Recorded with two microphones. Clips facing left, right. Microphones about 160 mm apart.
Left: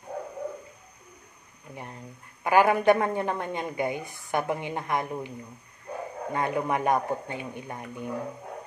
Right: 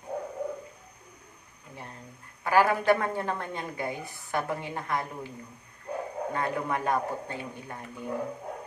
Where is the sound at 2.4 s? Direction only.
15° left (ahead or behind).